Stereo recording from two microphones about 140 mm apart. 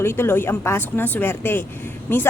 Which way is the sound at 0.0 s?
15° left (ahead or behind).